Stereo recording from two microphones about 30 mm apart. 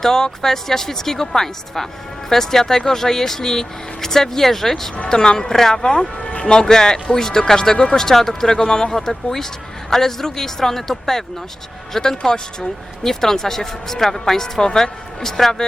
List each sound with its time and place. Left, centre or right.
0.0 s speech: centre
5.0 s speech: left